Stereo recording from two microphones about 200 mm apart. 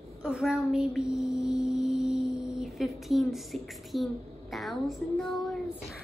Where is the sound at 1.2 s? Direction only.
5° right (ahead or behind).